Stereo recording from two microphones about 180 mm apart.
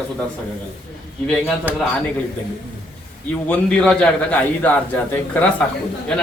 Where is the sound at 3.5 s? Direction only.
5° left (ahead or behind).